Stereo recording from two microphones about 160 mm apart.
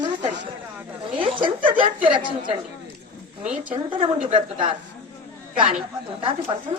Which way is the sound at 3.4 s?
10° right (ahead or behind).